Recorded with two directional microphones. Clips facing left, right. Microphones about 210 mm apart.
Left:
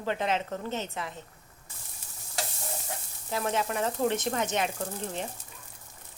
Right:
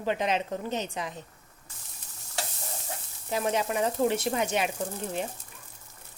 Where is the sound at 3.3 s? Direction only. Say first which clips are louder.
Right 2 dB; 15° right (ahead or behind).